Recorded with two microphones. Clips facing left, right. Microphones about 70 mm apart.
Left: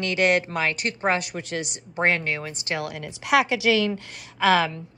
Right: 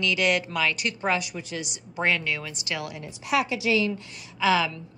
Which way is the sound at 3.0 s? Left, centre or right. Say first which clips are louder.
Left 5 dB; left.